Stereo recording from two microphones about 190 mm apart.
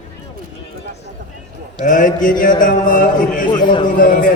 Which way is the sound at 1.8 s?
45° left (ahead or behind).